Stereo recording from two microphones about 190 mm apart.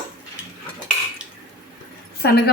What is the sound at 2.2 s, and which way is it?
Speech, 55° left (ahead or behind).